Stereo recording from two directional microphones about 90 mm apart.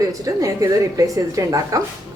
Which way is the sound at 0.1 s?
40° right (ahead or behind).